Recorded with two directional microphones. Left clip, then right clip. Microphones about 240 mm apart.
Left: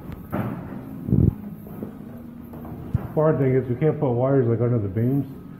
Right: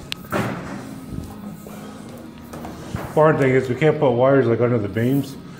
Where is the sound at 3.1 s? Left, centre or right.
Right.